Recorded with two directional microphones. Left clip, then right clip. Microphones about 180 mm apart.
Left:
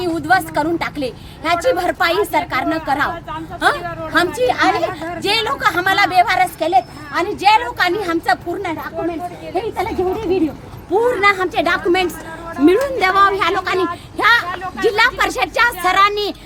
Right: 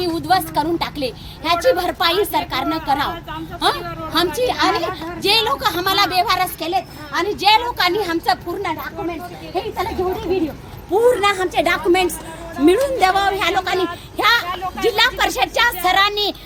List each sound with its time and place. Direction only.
0.0 s a woman's voice: 5° left (ahead or behind)
9.7 s a woman's voice: 15° left (ahead or behind)
10.9 s a woman's voice: 15° right (ahead or behind); by 16.3 s 5° left (ahead or behind)